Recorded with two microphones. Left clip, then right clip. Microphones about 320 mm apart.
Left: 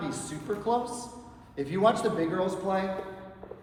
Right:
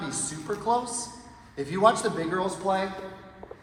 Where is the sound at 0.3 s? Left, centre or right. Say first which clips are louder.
Right 3 dB; right.